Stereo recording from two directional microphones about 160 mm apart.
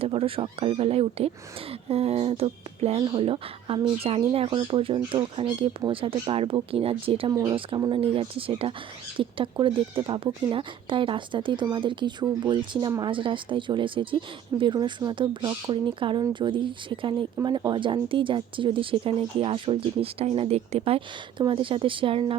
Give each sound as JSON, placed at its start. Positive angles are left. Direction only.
{"t": 0.0, "sound": "speech", "side_deg": -35}
{"t": 7.3, "sound": "speech", "side_deg": -25}